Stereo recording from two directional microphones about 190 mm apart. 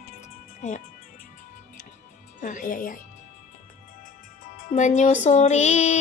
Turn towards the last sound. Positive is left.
turn(degrees=35)  # may be behind; listen again after turning